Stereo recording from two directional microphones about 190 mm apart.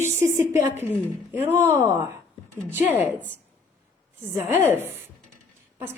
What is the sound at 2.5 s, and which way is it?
A woman's voice, 10° right (ahead or behind).